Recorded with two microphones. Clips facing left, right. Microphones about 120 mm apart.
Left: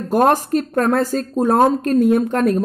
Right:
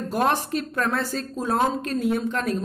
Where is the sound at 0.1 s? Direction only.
45° left (ahead or behind).